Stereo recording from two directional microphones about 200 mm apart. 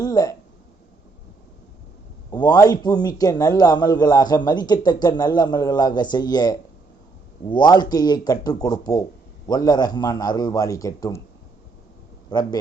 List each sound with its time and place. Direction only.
0.0 s speech: 20° left (ahead or behind)
2.3 s speech: 20° left (ahead or behind)
12.3 s speech: 20° left (ahead or behind)